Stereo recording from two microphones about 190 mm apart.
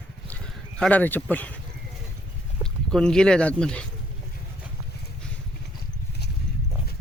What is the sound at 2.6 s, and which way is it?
Speech, 5° left (ahead or behind).